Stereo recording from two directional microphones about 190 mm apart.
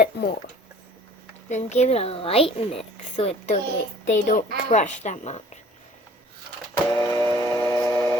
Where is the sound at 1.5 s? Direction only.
35° left (ahead or behind).